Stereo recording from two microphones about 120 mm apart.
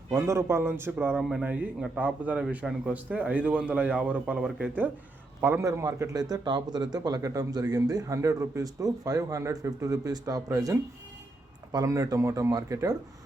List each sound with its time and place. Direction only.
0.1 s a man's voice: 20° right (ahead or behind)
5.4 s a man's voice: 20° right (ahead or behind)